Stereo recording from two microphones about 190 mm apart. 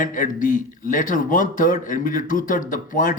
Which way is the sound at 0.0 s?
45° left (ahead or behind).